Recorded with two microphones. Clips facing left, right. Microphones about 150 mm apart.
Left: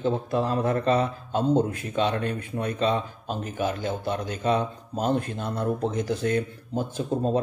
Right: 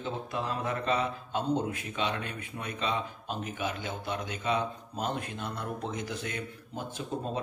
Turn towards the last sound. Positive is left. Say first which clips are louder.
# left 9 dB
turn(degrees=35)  # may be behind; listen again after turning